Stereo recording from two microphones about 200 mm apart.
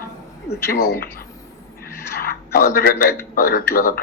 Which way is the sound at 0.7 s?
50° left (ahead or behind).